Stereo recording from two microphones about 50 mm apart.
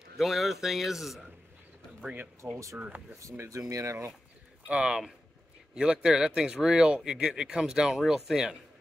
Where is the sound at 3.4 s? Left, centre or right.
Right.